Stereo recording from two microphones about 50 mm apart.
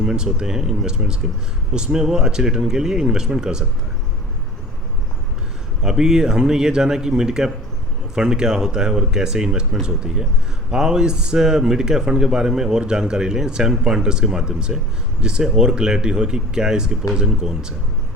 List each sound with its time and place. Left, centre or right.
0.0 s speech: centre
5.8 s speech: centre
10.7 s speech: centre